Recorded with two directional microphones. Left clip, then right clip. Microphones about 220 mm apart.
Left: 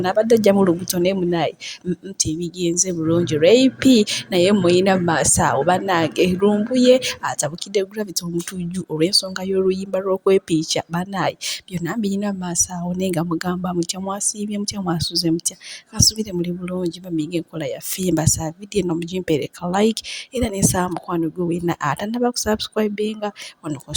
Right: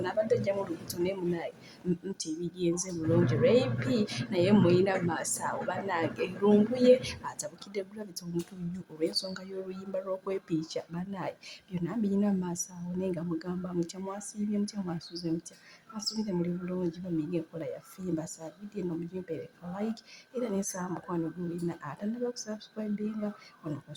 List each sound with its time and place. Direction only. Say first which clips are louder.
0.0 s speech: left 14 dB; 30° left (ahead or behind)